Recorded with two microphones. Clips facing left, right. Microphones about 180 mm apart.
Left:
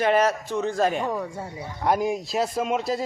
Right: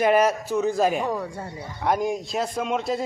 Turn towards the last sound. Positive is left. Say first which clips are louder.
# even
turn(degrees=0)  # may be behind; listen again after turning